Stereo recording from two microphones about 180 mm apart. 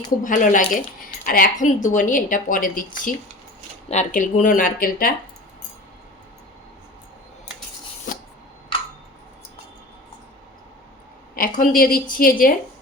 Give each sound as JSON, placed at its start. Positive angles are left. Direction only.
{"t": 0.3, "sound": "speech", "side_deg": 45}
{"t": 11.3, "sound": "speech", "side_deg": 50}